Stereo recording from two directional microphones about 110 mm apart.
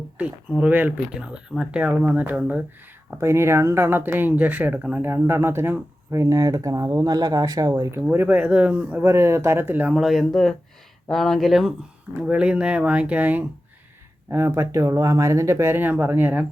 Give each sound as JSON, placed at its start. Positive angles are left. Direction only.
{"t": 0.2, "sound": "speech", "side_deg": -10}
{"t": 3.2, "sound": "speech", "side_deg": -25}
{"t": 7.8, "sound": "speech", "side_deg": -25}